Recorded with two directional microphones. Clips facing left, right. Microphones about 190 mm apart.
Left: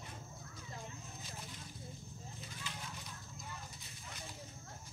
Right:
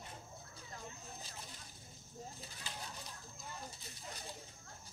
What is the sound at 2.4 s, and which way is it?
Vehicle, 35° right (ahead or behind).